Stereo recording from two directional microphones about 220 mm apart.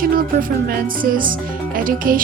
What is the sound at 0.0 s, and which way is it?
Speech, 40° right (ahead or behind).